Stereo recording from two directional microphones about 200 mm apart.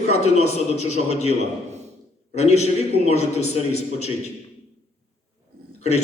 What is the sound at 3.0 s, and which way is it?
A man's voice, 30° left (ahead or behind).